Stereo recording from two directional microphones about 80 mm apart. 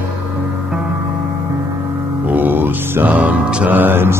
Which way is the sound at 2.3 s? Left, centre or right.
Right.